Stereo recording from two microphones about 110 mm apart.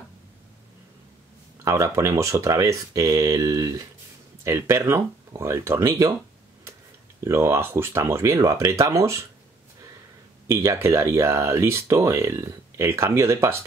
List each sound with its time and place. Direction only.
1.6 s speech: 30° right (ahead or behind)
7.2 s speech: 25° right (ahead or behind)
10.5 s speech: 25° right (ahead or behind)